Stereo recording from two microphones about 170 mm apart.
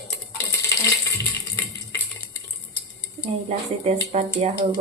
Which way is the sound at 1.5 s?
15° left (ahead or behind).